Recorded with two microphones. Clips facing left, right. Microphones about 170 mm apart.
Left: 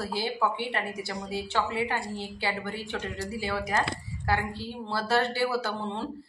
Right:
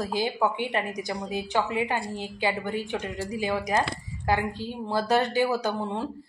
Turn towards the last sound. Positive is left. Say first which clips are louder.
# right 3 dB
turn(degrees=-15)  # may be behind; listen again after turning